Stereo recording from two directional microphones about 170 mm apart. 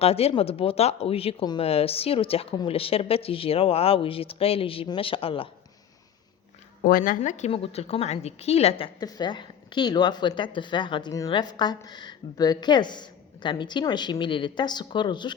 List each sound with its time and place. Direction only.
0.0 s speech: 35° left (ahead or behind)
6.8 s a woman's voice: 55° left (ahead or behind); by 15.4 s 25° left (ahead or behind)